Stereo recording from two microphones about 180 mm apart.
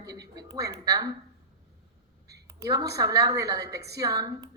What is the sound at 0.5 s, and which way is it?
Speech, 20° right (ahead or behind).